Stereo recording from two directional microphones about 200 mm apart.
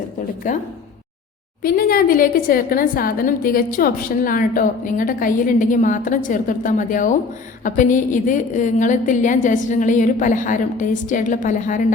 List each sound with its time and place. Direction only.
0.4 s a woman's voice: 40° left (ahead or behind)
1.6 s a woman's voice: 45° left (ahead or behind)